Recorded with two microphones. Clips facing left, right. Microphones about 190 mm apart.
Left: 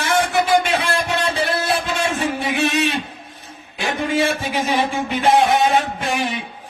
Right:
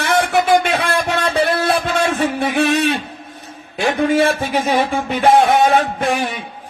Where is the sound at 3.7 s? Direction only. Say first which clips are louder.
Right 5 dB; 55° right (ahead or behind).